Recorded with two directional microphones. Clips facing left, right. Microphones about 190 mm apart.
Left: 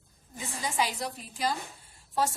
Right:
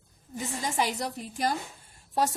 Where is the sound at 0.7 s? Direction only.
45° right (ahead or behind).